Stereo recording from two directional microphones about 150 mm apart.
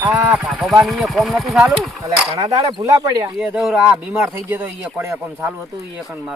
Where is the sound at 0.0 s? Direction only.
10° right (ahead or behind).